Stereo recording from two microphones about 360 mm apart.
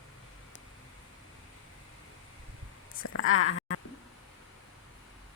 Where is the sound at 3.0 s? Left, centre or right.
Left.